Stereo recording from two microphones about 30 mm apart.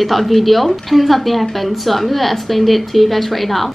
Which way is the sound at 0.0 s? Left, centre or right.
Centre.